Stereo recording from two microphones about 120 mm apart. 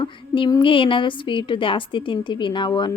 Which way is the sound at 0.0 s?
45° left (ahead or behind).